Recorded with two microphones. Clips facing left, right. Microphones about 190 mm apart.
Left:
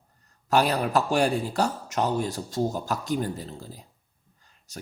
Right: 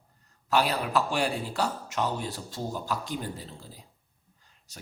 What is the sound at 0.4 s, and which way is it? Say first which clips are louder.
Speech: left 3 dB; 45° left (ahead or behind).